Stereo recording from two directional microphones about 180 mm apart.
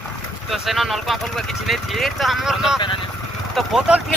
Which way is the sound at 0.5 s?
Centre (ahead or behind).